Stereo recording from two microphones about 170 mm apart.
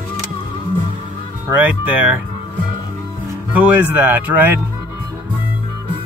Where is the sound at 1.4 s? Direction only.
10° right (ahead or behind).